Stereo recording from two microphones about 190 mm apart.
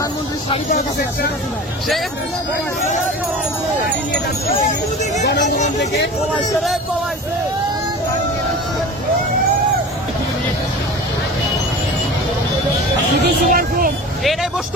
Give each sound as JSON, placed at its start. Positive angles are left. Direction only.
{"t": 0.5, "sound": "speech", "side_deg": 35}
{"t": 13.2, "sound": "speech", "side_deg": -50}